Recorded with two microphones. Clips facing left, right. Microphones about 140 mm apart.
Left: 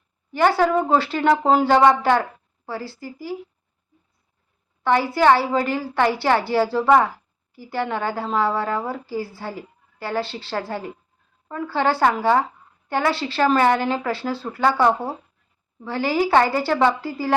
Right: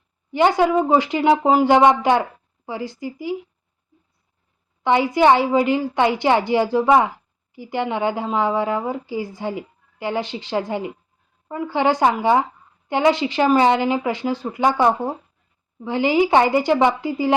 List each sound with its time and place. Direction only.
0.3 s a woman's voice: 15° right (ahead or behind)
4.8 s a woman's voice: 15° right (ahead or behind)